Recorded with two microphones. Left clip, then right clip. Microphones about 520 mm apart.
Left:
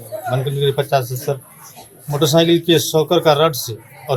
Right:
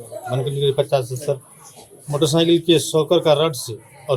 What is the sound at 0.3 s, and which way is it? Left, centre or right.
A man's voice, left.